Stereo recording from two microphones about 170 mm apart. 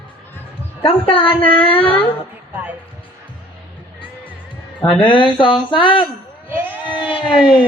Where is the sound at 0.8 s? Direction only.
30° left (ahead or behind).